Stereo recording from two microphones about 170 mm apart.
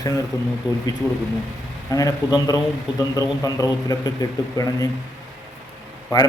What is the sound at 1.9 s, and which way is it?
A man's voice, 20° left (ahead or behind).